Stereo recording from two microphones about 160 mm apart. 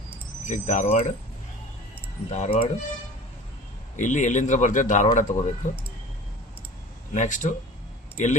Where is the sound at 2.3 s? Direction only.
40° left (ahead or behind).